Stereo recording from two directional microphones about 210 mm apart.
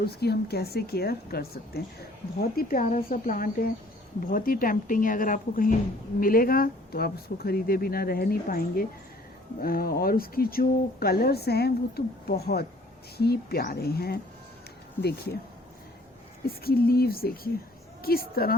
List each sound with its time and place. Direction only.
0.0 s a woman's voice: 50° left (ahead or behind)
16.5 s a woman's voice: 45° left (ahead or behind)